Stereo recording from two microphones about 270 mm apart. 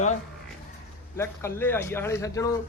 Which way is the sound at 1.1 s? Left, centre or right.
Centre.